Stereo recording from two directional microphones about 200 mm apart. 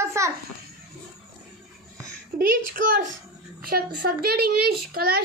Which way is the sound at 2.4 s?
45° right (ahead or behind).